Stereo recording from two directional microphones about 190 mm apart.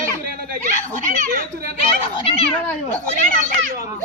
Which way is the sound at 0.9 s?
40° right (ahead or behind).